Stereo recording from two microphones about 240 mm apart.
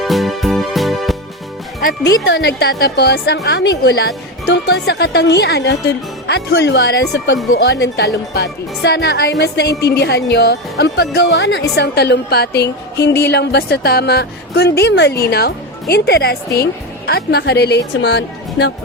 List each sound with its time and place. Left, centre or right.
0.0 s music: centre
2.0 s speech: left